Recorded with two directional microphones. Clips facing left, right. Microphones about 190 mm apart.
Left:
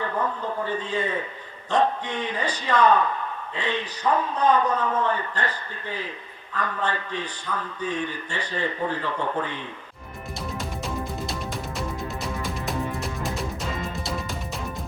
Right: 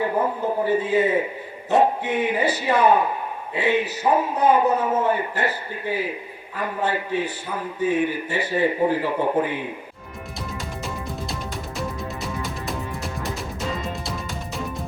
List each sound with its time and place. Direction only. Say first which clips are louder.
0.0 s a sound: right 5 dB; 20° right (ahead or behind)
0.6 s a man's voice: right 8 dB; 10° right (ahead or behind)
12.4 s music: left 1 dB; centre (ahead or behind)